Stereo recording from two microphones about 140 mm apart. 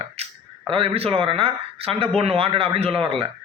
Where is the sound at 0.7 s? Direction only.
45° right (ahead or behind).